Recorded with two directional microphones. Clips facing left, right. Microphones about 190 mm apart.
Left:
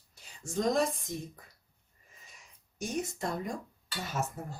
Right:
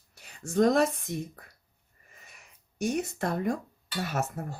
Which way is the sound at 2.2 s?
65° right (ahead or behind).